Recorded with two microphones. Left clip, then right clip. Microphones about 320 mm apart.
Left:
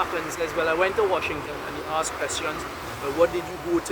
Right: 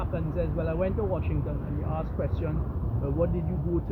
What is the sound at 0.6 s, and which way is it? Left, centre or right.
Speech, left.